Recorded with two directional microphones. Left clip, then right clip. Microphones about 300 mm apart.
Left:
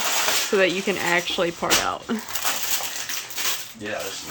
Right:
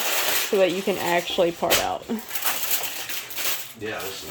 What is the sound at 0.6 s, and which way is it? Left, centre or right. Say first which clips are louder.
Speech: even; centre.